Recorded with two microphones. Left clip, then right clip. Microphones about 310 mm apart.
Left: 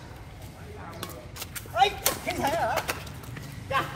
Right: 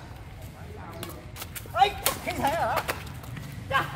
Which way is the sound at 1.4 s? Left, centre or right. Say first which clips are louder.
Right 1 dB; centre.